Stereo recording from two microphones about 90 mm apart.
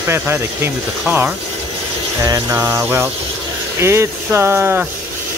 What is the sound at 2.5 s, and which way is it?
Speech, 30° right (ahead or behind).